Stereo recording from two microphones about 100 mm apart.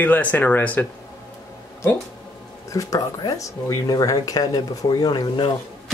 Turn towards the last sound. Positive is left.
turn(degrees=50)  # may be behind; listen again after turning